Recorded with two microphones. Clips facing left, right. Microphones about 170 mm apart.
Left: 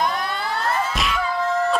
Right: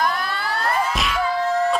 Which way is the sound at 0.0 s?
20° left (ahead or behind).